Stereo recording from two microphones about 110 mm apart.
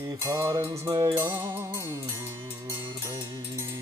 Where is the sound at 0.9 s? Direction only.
40° right (ahead or behind).